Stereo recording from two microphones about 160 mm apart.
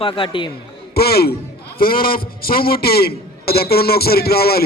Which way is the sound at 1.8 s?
65° left (ahead or behind).